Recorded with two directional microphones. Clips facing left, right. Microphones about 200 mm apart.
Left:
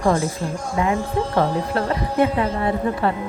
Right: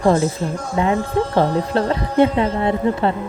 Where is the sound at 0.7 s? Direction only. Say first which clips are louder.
Right 3 dB; 25° right (ahead or behind).